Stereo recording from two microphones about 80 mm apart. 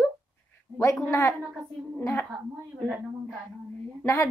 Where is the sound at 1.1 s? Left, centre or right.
Left.